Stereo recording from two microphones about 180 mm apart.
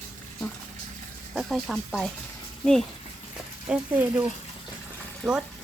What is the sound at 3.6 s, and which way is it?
Speech, 10° right (ahead or behind).